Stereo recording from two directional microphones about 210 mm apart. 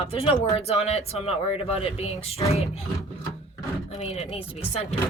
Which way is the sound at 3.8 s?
30° left (ahead or behind).